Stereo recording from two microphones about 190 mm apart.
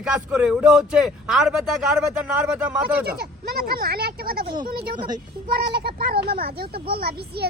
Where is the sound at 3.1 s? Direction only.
55° right (ahead or behind).